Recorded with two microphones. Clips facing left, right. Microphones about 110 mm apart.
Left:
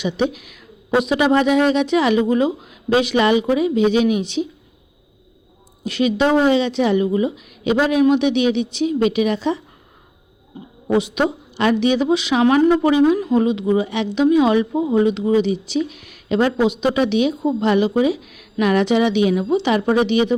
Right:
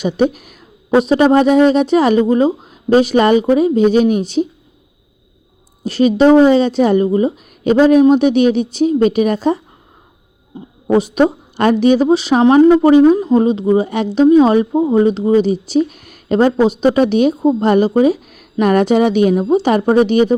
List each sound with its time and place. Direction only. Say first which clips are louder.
0.0 s a woman's voice: right 5 dB; 45° right (ahead or behind)
5.8 s a woman's voice: right 7 dB; 40° right (ahead or behind)
10.8 s a woman's voice: right 6 dB; 40° right (ahead or behind)